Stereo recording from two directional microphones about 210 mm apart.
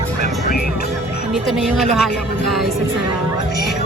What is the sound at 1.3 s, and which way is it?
Speech, centre (ahead or behind).